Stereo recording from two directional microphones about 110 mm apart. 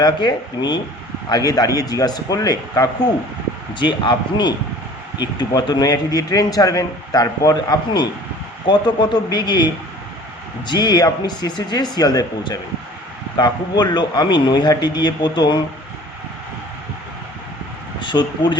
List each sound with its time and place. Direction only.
0.0 s a man's voice: 40° left (ahead or behind)
3.8 s a man's voice: 45° left (ahead or behind)
10.7 s a man's voice: 40° left (ahead or behind)
18.0 s speech: 40° left (ahead or behind)